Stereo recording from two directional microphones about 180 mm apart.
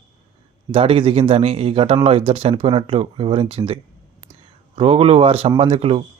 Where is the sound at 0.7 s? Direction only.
30° right (ahead or behind).